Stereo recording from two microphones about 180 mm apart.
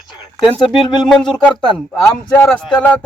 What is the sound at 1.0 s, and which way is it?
Speech, 5° left (ahead or behind).